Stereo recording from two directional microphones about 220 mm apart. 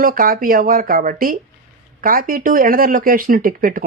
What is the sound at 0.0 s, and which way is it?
Speech, 40° right (ahead or behind).